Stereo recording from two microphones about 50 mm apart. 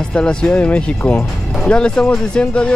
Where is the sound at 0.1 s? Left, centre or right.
Centre.